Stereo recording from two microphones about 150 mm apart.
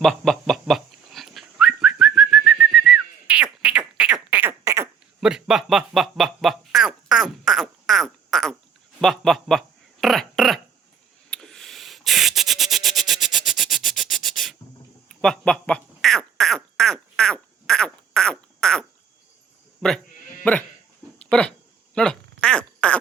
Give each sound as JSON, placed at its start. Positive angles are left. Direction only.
{"t": 0.0, "sound": "dog", "side_deg": 5}
{"t": 5.2, "sound": "a sound", "side_deg": -5}
{"t": 20.4, "sound": "sheep", "side_deg": 10}
{"t": 21.2, "sound": "dog", "side_deg": 5}
{"t": 21.9, "sound": "quack", "side_deg": 5}